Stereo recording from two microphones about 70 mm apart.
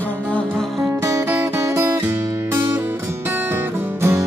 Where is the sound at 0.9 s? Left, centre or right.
Right.